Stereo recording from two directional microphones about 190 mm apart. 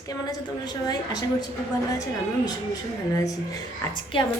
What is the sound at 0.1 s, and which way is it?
Speech, 20° left (ahead or behind).